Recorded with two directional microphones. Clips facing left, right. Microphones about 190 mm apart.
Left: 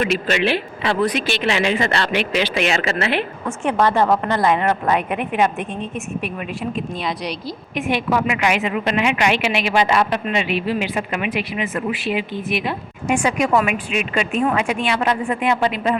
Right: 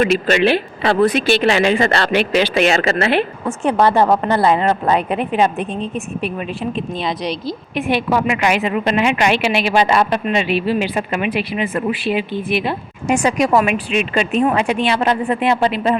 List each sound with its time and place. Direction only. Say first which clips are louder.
0.3 s speech: right 5 dB; 40° right (ahead or behind)